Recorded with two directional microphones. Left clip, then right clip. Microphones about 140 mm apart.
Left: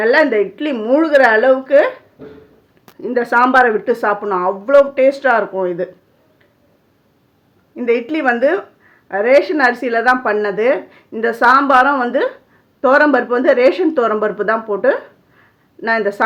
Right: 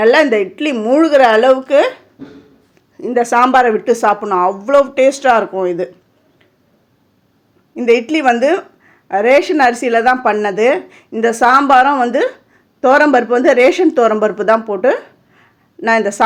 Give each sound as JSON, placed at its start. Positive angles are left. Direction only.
{"t": 0.0, "sound": "a woman's voice", "side_deg": -30}
{"t": 3.0, "sound": "a woman's voice", "side_deg": -25}
{"t": 7.8, "sound": "a woman's voice", "side_deg": -30}